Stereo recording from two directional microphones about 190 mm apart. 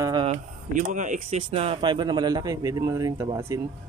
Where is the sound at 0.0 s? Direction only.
20° right (ahead or behind).